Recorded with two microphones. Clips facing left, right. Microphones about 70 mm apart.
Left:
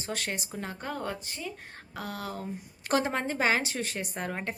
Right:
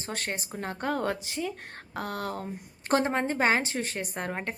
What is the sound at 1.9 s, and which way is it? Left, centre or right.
Speech, right.